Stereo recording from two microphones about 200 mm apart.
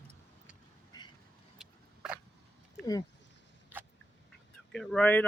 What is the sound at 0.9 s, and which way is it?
Vehicle, 20° left (ahead or behind).